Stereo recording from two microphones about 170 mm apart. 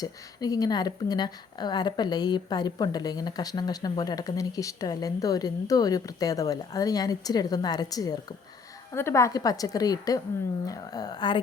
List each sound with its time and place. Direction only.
0.0 s speech: 20° left (ahead or behind)